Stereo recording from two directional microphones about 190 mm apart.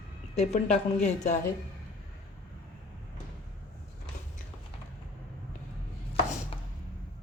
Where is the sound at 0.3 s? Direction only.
35° left (ahead or behind).